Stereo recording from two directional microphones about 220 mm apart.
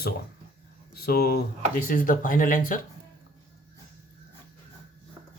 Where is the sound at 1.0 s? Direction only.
45° left (ahead or behind).